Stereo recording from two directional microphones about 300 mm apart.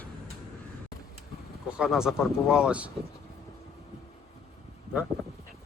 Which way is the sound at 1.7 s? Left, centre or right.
Centre.